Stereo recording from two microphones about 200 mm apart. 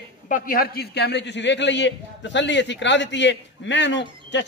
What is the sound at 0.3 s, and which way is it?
A man's voice, 45° left (ahead or behind).